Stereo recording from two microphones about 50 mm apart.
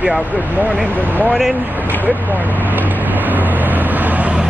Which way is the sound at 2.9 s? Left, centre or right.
Right.